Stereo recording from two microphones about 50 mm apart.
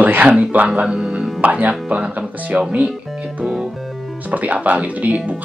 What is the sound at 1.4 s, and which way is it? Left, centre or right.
Speech, right.